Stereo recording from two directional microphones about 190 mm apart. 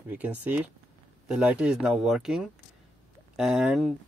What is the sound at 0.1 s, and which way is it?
Speech, 10° right (ahead or behind).